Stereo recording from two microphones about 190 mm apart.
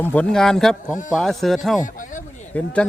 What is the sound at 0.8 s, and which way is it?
Speech, 40° left (ahead or behind).